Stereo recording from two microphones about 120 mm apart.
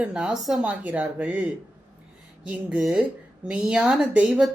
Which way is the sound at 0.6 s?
10° right (ahead or behind).